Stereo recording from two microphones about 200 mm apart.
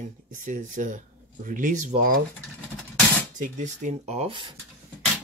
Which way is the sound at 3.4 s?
40° right (ahead or behind).